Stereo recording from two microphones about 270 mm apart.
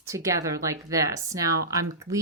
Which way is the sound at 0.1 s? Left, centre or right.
Centre.